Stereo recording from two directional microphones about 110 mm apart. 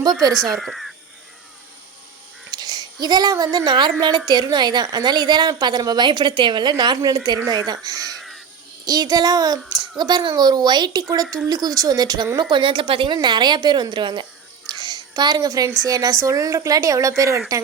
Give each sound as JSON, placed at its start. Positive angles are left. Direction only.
{"t": 0.3, "sound": "speech", "side_deg": 0}
{"t": 2.5, "sound": "a woman's voice", "side_deg": -40}
{"t": 14.7, "sound": "a sound", "side_deg": -40}
{"t": 15.8, "sound": "a woman's voice", "side_deg": -35}